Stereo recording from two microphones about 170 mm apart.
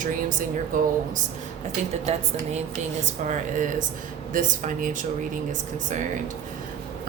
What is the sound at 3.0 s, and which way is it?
A woman's voice, 45° right (ahead or behind).